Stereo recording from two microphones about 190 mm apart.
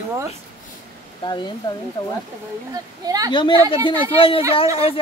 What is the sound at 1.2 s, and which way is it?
Speech, 25° left (ahead or behind).